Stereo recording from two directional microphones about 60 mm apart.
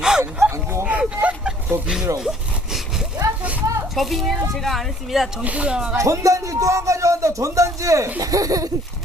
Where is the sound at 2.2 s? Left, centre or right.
Centre.